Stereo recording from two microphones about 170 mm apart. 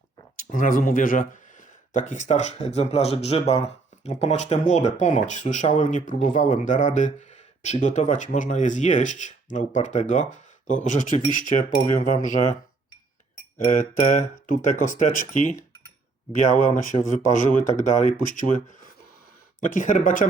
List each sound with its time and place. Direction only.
0.3 s speech: 50° left (ahead or behind)
13.7 s speech: 45° left (ahead or behind)